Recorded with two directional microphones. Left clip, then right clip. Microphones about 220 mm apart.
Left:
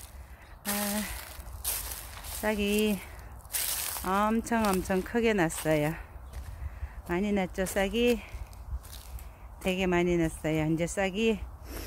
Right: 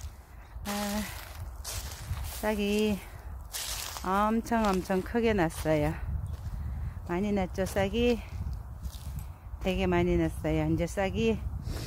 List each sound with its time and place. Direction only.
0.7 s a sound: 10° left (ahead or behind)
2.1 s speech: centre (ahead or behind)
3.5 s a sound: 15° left (ahead or behind)
4.0 s speech: 5° right (ahead or behind)
7.1 s speech: centre (ahead or behind)
9.6 s speech: 5° right (ahead or behind)